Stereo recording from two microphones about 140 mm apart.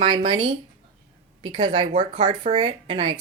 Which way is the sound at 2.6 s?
30° right (ahead or behind).